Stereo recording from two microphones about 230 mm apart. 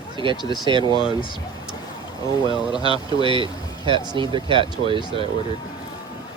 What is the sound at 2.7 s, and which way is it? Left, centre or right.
Speech, right.